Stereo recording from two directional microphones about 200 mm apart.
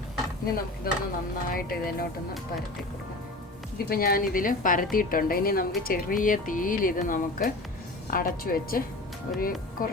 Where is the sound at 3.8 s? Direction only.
50° left (ahead or behind).